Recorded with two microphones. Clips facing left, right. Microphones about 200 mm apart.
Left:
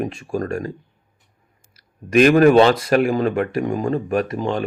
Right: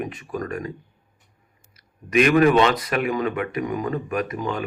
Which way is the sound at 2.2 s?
35° left (ahead or behind).